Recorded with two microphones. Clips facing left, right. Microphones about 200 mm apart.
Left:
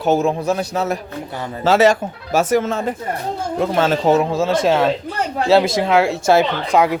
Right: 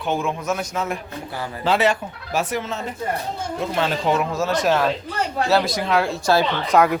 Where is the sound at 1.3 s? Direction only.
20° left (ahead or behind).